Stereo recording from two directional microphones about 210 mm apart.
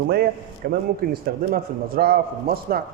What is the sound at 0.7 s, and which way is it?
A man's voice, 45° right (ahead or behind).